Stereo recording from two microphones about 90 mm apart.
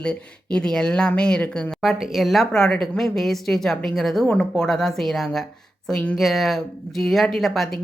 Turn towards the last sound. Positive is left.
turn(degrees=0)  # may be behind; listen again after turning